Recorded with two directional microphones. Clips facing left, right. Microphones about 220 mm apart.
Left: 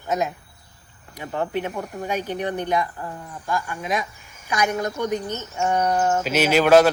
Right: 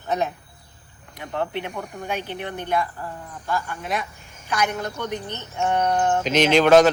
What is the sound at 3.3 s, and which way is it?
A woman's voice, 10° left (ahead or behind).